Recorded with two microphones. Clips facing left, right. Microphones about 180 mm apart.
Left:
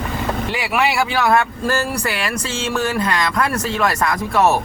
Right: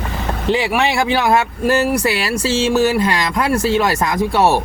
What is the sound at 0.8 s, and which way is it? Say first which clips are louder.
Speech: right 2 dB; 20° right (ahead or behind).